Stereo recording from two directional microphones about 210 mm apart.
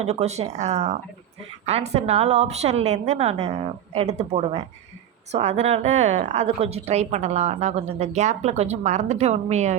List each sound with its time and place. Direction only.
0.0 s a woman's voice: 30° right (ahead or behind)